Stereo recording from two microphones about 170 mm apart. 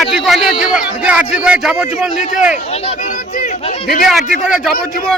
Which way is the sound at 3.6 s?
35° left (ahead or behind).